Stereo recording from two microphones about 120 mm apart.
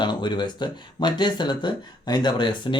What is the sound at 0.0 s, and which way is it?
Speech, 40° left (ahead or behind).